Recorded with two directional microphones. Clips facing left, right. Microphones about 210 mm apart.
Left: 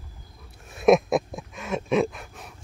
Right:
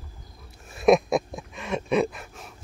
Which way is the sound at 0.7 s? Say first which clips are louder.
Left 1 dB; centre (ahead or behind).